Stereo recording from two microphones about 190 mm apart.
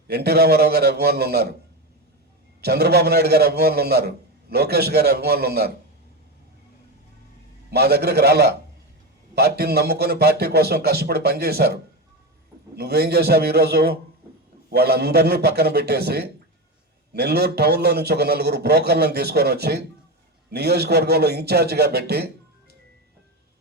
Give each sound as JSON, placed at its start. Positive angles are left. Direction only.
{"t": 0.1, "sound": "a man's voice", "side_deg": -60}
{"t": 2.6, "sound": "a man's voice", "side_deg": -55}
{"t": 7.7, "sound": "a man's voice", "side_deg": -55}